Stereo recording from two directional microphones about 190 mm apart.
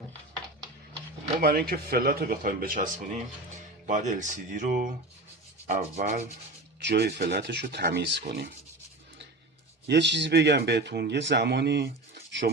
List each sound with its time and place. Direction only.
1.4 s speech: 55° right (ahead or behind)
6.8 s speech: 60° right (ahead or behind)
7.9 s rub: 65° right (ahead or behind)
9.8 s speech: 65° right (ahead or behind)